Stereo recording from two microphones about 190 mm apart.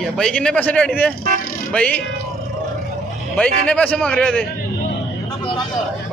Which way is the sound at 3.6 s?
5° left (ahead or behind).